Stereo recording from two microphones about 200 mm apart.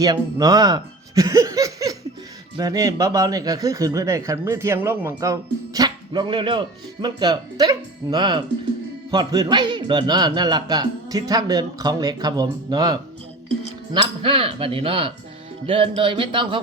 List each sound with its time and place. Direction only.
0.0 s a man's voice: 20° right (ahead or behind)